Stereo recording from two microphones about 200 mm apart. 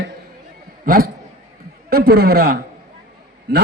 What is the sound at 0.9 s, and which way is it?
A man's voice, 45° right (ahead or behind).